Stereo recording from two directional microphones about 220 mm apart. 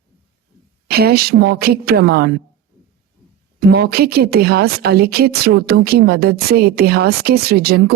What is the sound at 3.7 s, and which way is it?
A woman's voice, 45° right (ahead or behind).